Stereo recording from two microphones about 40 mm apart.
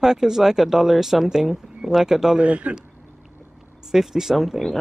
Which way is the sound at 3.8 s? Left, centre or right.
Centre.